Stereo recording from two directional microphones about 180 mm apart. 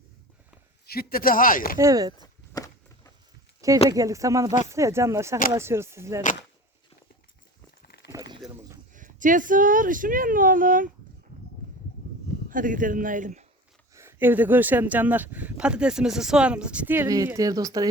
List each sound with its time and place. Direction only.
0.9 s speech: 55° left (ahead or behind)
1.8 s speech: 20° right (ahead or behind)
2.2 s walk: 20° left (ahead or behind)
3.8 s speech: 20° right (ahead or behind)
7.8 s a sound: 65° left (ahead or behind)
8.1 s a sound: 20° right (ahead or behind)
8.9 s speech: 45° right (ahead or behind)
12.5 s speech: 50° right (ahead or behind)
13.9 s speech: 15° right (ahead or behind)